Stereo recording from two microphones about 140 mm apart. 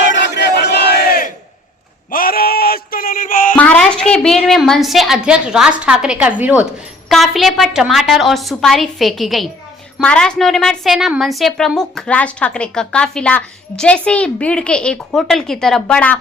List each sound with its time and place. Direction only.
0.9 s crowd: 90° left
2.0 s a sound: 90° left; by 3.5 s 75° left (ahead or behind)
3.5 s a woman's voice: 10° left (ahead or behind); by 6.7 s 10° right (ahead or behind)
7.1 s a woman's voice: centre (ahead or behind)